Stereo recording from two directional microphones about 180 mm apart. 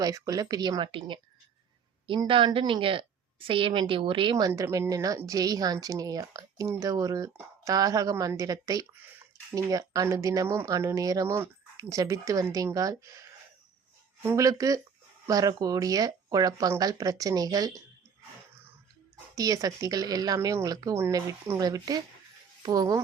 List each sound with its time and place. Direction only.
0.0 s a woman's voice: 20° right (ahead or behind)
19.4 s a woman's voice: 20° right (ahead or behind)